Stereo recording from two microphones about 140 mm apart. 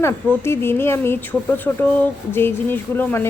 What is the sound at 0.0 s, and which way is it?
Speech, 15° left (ahead or behind).